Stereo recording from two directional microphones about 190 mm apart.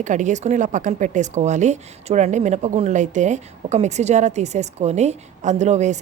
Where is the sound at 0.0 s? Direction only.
40° right (ahead or behind).